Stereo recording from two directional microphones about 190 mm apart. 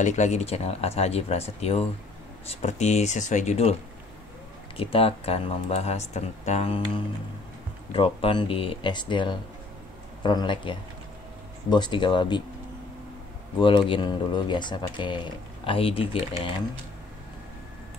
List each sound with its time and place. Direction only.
0.0 s speech: 40° left (ahead or behind)
4.7 s speech: 30° left (ahead or behind)
7.9 s speech: 30° left (ahead or behind)
13.6 s speech: 25° left (ahead or behind)